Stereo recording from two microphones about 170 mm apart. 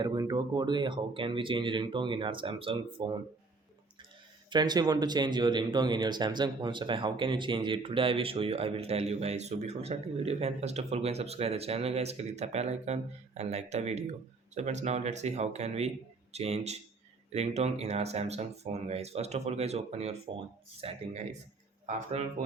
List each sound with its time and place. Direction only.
0.0 s speech: 25° right (ahead or behind)
4.4 s speech: 25° right (ahead or behind); by 22.2 s 45° right (ahead or behind)